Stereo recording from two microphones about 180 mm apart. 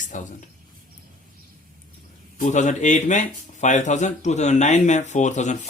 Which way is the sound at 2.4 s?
40° left (ahead or behind).